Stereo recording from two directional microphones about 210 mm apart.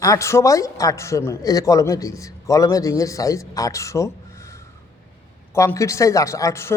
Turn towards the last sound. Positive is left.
turn(degrees=15)  # may be behind; listen again after turning